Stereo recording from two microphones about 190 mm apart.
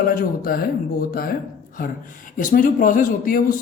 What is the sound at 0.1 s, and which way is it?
Speech, 50° left (ahead or behind).